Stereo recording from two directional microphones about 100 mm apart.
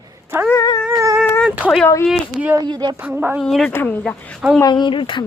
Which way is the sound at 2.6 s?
45° right (ahead or behind).